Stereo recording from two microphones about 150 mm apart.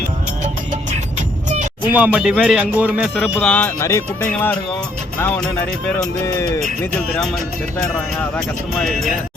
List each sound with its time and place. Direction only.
1.9 s speech: 10° right (ahead or behind)
3.2 s speech: 10° left (ahead or behind)
6.0 s speech: 20° left (ahead or behind)
8.8 s speech: centre (ahead or behind)